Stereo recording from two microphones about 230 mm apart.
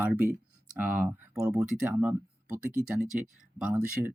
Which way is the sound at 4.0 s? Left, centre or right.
Centre.